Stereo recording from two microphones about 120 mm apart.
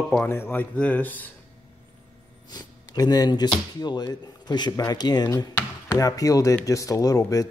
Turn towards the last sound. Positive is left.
turn(degrees=30)  # may be behind; listen again after turning